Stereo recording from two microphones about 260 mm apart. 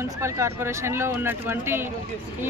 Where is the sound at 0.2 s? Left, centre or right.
Centre.